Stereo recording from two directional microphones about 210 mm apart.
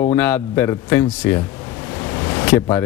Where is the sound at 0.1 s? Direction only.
10° left (ahead or behind).